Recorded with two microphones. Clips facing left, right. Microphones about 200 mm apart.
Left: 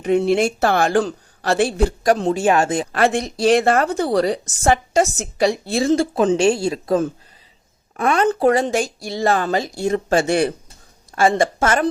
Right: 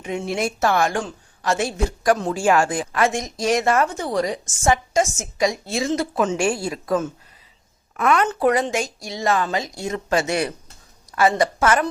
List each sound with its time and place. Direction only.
0.2 s a woman's voice: 30° left (ahead or behind)